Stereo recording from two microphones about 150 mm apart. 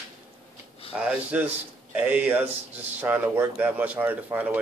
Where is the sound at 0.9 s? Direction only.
10° right (ahead or behind).